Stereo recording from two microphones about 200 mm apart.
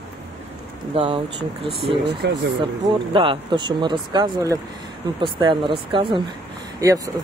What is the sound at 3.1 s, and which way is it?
Speech, 25° right (ahead or behind).